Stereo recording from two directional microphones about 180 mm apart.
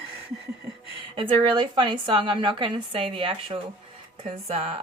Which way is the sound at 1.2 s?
25° right (ahead or behind).